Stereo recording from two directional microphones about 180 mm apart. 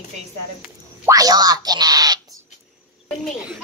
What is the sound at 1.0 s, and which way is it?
Speech, 20° right (ahead or behind).